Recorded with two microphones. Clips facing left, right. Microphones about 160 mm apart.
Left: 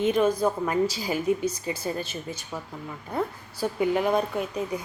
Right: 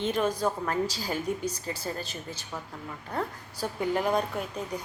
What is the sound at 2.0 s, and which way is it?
Speech, 35° right (ahead or behind).